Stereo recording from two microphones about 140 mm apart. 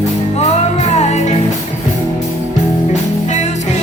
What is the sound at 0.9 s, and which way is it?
Music, 55° left (ahead or behind).